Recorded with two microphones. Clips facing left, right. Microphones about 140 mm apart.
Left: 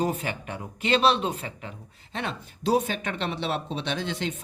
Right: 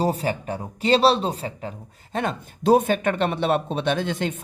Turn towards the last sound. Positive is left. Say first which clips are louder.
# right 6 dB
turn(degrees=-50)  # may be behind; listen again after turning